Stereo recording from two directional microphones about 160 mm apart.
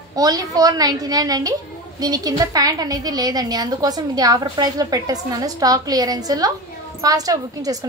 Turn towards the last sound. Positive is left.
turn(degrees=-20)  # may be behind; listen again after turning